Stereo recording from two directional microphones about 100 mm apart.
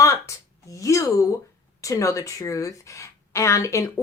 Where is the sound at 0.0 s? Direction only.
30° left (ahead or behind).